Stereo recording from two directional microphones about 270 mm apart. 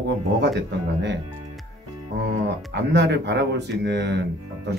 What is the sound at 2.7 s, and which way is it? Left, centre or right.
Speech, right.